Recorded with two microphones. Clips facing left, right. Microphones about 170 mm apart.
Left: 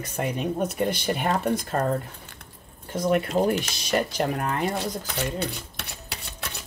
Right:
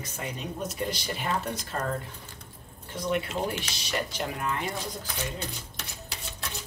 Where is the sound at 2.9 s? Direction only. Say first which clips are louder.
Left 7 dB; 45° left (ahead or behind).